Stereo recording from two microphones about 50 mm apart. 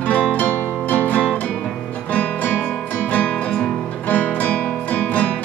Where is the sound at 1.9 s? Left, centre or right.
Left.